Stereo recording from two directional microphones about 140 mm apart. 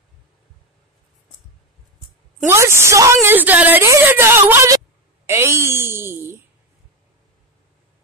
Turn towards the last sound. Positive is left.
turn(degrees=-15)  # may be behind; listen again after turning